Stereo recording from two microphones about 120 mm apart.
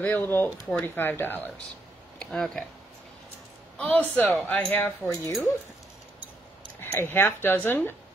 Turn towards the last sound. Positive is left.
turn(degrees=15)  # may be behind; listen again after turning